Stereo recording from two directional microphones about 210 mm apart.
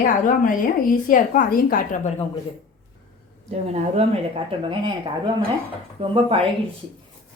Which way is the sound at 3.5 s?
30° right (ahead or behind).